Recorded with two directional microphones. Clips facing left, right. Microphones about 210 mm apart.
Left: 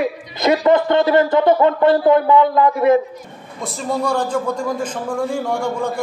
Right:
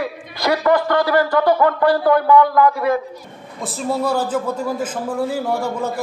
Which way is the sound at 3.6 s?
5° right (ahead or behind).